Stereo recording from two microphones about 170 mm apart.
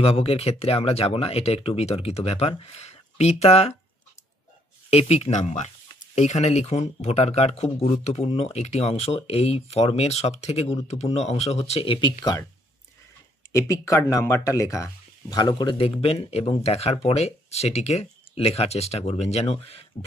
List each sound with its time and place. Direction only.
0.0 s speech: 35° left (ahead or behind)
4.8 s speech: 35° left (ahead or behind)
13.5 s speech: 20° left (ahead or behind); by 19.8 s 35° left (ahead or behind)